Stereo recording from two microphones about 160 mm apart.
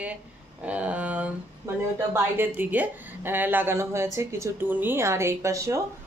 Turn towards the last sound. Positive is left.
turn(degrees=-20)  # may be behind; listen again after turning